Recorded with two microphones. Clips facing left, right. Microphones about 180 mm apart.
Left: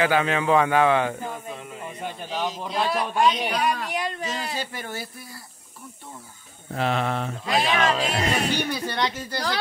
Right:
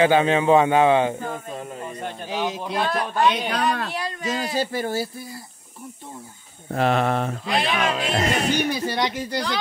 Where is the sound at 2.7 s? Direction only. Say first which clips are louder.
Left 1 dB; 10° left (ahead or behind).